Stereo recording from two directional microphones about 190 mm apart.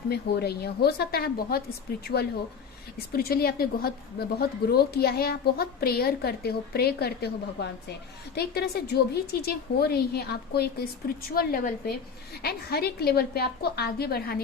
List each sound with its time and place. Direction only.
0.1 s a woman's voice: 60° left (ahead or behind)
3.1 s a woman's voice: 50° left (ahead or behind)
8.4 s a woman's voice: 55° left (ahead or behind)